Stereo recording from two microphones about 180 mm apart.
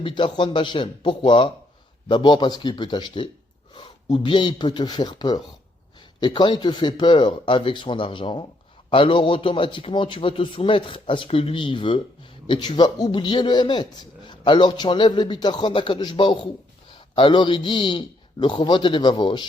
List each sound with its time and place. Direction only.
0.0 s a man's voice: 25° left (ahead or behind)